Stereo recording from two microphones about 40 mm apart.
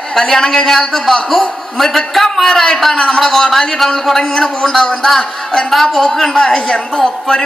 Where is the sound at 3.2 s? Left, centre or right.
Centre.